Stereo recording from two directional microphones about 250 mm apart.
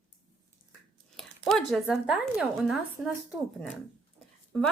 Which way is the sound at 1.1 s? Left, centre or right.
Centre.